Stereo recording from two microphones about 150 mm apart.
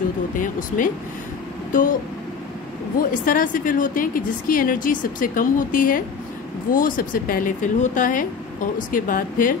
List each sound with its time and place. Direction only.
0.4 s a sound: 60° left (ahead or behind)
1.7 s speech: 65° left (ahead or behind)
3.0 s speech: 65° left (ahead or behind)